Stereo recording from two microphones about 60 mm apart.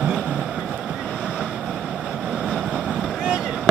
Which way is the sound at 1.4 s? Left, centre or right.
Centre.